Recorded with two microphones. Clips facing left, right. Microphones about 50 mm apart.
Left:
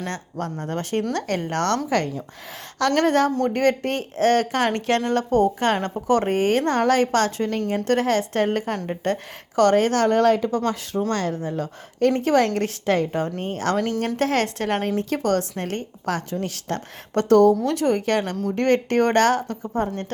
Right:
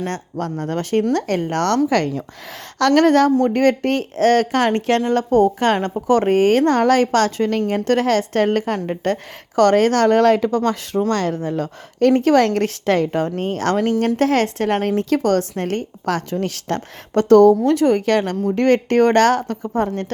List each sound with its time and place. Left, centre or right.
0.1 s speech: right
1.9 s speech: right
4.7 s speech: right
11.1 s speech: right
13.4 s speech: right
14.2 s speech: right
16.4 s speech: right
17.2 s speech: right